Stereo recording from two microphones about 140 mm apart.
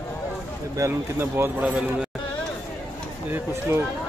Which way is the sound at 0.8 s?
15° right (ahead or behind).